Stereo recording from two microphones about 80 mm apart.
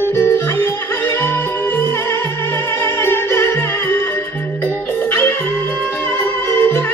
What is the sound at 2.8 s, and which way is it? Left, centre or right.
Music, left.